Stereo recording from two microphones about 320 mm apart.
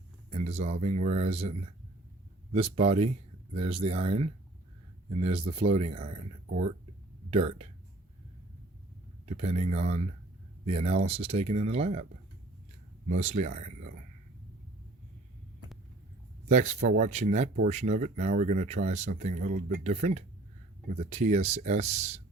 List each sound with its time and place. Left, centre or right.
0.3 s speech: centre
2.7 s speech: centre
9.2 s speech: centre
13.1 s speech: right
16.5 s speech: right